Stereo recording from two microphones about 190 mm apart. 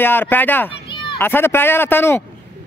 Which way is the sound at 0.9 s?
25° left (ahead or behind).